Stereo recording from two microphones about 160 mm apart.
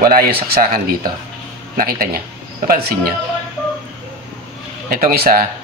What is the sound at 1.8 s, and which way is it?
Speech, 65° right (ahead or behind).